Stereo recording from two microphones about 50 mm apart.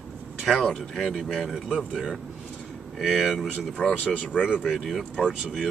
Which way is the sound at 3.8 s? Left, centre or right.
Left.